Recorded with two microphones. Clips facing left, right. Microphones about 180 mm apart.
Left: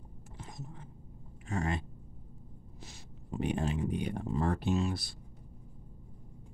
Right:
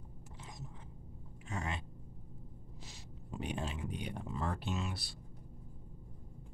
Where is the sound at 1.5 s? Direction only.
45° left (ahead or behind).